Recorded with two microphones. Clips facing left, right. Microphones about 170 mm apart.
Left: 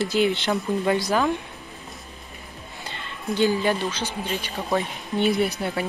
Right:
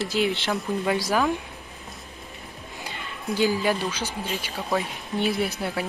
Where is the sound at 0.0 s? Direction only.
Centre (ahead or behind).